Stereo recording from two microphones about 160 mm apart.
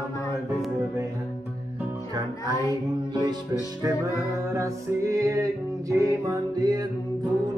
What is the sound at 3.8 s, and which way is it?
Music, 20° right (ahead or behind).